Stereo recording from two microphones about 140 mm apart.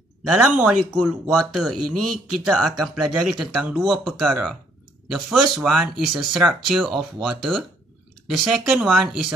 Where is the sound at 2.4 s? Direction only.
Centre (ahead or behind).